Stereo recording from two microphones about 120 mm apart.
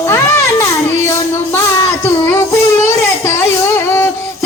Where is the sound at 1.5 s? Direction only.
20° left (ahead or behind).